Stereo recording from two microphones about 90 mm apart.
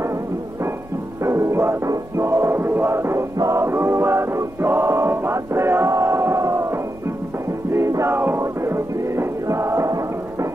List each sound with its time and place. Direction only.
0.0 s music: 30° right (ahead or behind)